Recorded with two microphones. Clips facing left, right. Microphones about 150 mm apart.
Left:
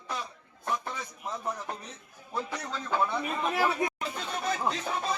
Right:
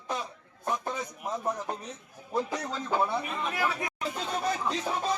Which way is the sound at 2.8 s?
20° right (ahead or behind).